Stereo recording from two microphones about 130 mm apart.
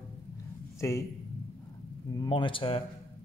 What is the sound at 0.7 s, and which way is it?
Speech, 20° left (ahead or behind).